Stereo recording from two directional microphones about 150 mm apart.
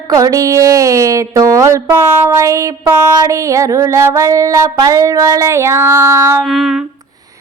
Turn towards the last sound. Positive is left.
turn(degrees=0)  # may be behind; listen again after turning